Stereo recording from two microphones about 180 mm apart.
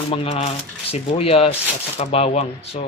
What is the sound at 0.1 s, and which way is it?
Speech, 30° left (ahead or behind).